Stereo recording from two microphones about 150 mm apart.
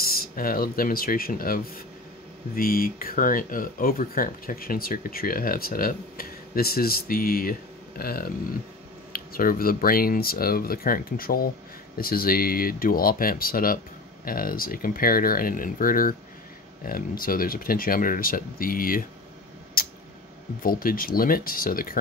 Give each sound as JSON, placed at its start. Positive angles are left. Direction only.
{"t": 0.0, "sound": "speech", "side_deg": 80}
{"t": 19.8, "sound": "a sound", "side_deg": 75}
{"t": 20.6, "sound": "speech", "side_deg": 70}